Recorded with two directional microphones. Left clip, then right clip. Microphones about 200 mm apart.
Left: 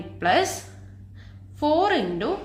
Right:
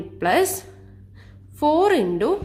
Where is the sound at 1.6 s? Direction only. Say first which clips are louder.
Right 3 dB; 35° right (ahead or behind).